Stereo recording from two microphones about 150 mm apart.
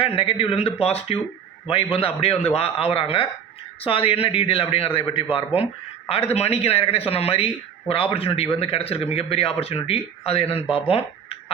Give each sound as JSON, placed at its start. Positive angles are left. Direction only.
{"t": 0.0, "sound": "speech", "side_deg": 40}